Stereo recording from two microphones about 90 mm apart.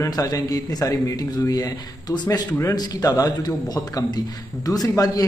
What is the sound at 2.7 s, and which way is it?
A man's voice, 45° left (ahead or behind).